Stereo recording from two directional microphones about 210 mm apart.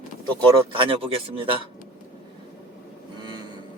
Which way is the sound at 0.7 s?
25° right (ahead or behind).